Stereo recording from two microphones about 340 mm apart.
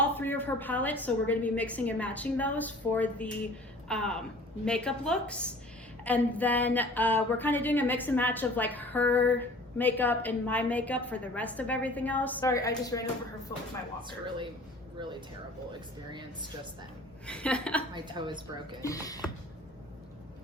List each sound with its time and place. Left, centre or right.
0.0 s speech: centre
17.2 s speech: centre
17.9 s a woman's voice: centre
18.8 s speech: centre